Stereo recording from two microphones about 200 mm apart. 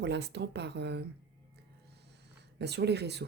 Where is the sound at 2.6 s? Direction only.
55° right (ahead or behind).